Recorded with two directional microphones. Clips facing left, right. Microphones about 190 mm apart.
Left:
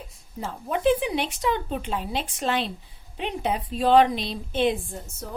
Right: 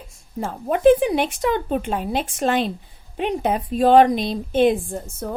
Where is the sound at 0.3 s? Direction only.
50° right (ahead or behind).